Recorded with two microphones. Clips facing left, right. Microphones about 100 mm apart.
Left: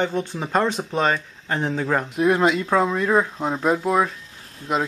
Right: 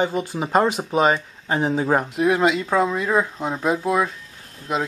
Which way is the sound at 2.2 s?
5° right (ahead or behind).